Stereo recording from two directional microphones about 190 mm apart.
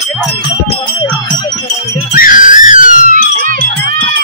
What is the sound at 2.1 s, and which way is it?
Whistle, 45° left (ahead or behind).